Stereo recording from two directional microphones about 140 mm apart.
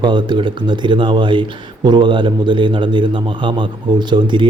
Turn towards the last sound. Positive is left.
turn(degrees=-35)  # may be behind; listen again after turning